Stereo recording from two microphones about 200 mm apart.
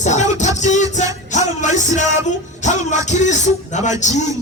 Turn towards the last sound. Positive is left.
turn(degrees=35)  # may be behind; listen again after turning